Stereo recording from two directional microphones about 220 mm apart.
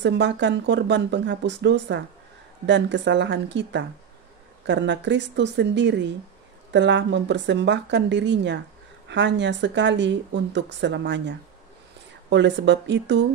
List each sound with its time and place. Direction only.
0.0 s speech: 55° right (ahead or behind)